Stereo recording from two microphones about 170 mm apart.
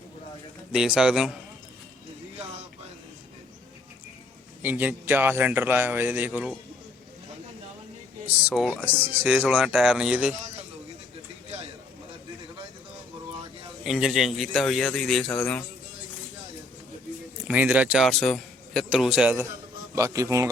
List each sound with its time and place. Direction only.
0.7 s a man's voice: 5° right (ahead or behind)
4.6 s a man's voice: 10° right (ahead or behind)
8.3 s a man's voice: 5° right (ahead or behind)
13.8 s a man's voice: centre (ahead or behind)
17.5 s a man's voice: 10° right (ahead or behind)